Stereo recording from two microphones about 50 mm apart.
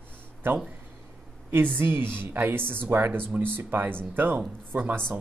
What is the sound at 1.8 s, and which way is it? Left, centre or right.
Speech, right.